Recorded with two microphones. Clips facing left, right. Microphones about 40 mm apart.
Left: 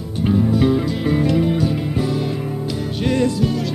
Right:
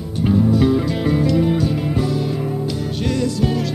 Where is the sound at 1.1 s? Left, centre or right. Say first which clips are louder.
Even; left.